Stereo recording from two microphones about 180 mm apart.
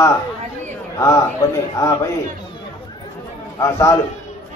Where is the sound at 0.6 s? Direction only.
20° left (ahead or behind).